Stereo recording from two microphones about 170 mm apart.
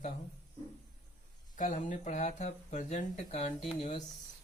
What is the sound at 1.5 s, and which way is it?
Speech, 45° left (ahead or behind).